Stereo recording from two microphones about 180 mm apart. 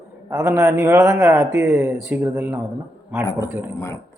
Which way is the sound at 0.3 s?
15° right (ahead or behind).